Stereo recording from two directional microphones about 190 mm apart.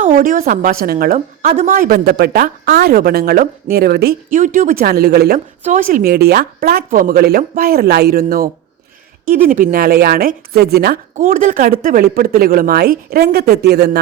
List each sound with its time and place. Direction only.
0.0 s a woman's voice: 45° right (ahead or behind)
5.6 s a woman's voice: 45° right (ahead or behind)